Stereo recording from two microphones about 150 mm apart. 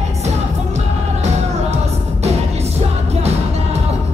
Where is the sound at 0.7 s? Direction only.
50° right (ahead or behind).